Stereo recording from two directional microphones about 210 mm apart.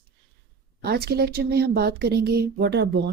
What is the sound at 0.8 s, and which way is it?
Speech, 50° right (ahead or behind).